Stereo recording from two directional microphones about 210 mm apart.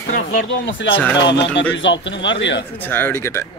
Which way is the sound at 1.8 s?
60° left (ahead or behind).